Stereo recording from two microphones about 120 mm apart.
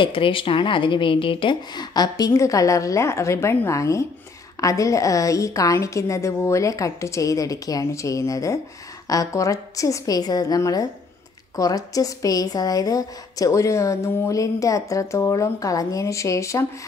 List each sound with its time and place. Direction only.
0.0 s a woman's voice: 45° left (ahead or behind); by 16.6 s 25° left (ahead or behind)